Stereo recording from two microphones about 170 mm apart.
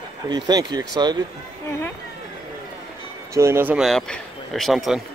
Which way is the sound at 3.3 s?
15° right (ahead or behind).